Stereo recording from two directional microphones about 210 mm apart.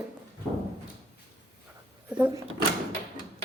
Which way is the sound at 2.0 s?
5° right (ahead or behind).